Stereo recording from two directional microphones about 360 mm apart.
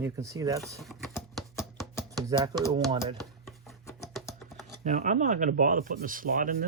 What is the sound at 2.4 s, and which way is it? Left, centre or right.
Speech, centre.